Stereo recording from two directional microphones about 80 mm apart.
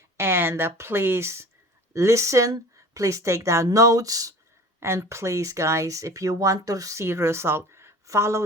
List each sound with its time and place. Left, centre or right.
0.2 s speech: right
4.8 s speech: right